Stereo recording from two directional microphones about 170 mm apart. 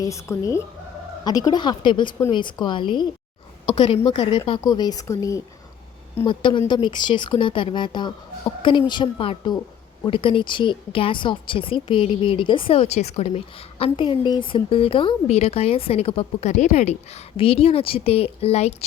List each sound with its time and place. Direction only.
0.0 s a woman's voice: 20° left (ahead or behind); by 18.9 s 40° left (ahead or behind)